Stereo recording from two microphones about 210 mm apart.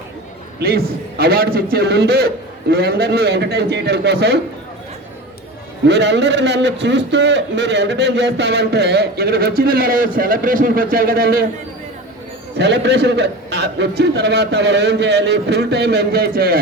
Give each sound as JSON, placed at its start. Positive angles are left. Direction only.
{"t": 0.6, "sound": "a man's voice", "side_deg": -50}
{"t": 5.9, "sound": "a man's voice", "side_deg": -55}
{"t": 12.5, "sound": "a man's voice", "side_deg": -55}